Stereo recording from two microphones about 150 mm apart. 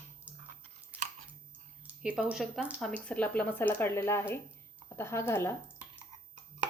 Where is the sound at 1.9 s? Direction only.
10° right (ahead or behind); by 5.5 s 15° left (ahead or behind).